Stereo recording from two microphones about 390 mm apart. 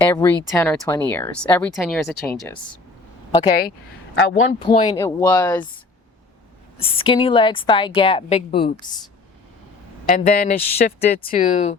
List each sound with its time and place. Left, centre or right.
0.1 s speech: centre
4.1 s speech: left
4.6 s a woman's voice: centre
6.7 s a woman's voice: centre
10.1 s speech: left